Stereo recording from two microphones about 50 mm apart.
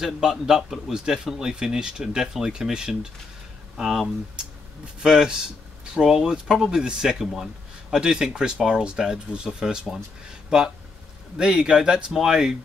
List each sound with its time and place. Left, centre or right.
0.0 s a man's voice: centre
5.0 s a man's voice: centre
11.3 s a man's voice: centre